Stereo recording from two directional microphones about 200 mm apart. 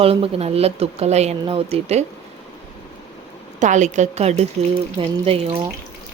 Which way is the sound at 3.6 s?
35° right (ahead or behind).